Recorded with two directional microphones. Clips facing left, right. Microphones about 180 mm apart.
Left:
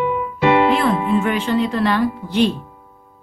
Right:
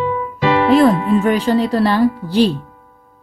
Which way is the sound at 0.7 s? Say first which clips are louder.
Right 6 dB; 35° right (ahead or behind).